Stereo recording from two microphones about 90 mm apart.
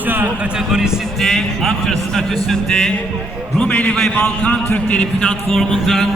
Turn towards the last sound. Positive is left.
turn(degrees=5)  # may be behind; listen again after turning